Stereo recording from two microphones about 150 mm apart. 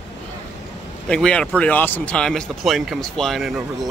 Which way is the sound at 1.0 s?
5° left (ahead or behind).